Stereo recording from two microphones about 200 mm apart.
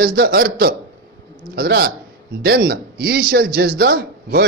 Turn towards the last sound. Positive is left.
turn(degrees=-50)  # may be behind; listen again after turning